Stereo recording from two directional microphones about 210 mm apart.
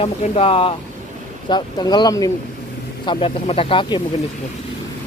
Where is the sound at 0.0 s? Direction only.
25° left (ahead or behind).